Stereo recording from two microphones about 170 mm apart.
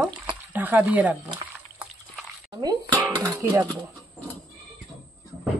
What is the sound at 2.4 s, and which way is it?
Music, 25° right (ahead or behind).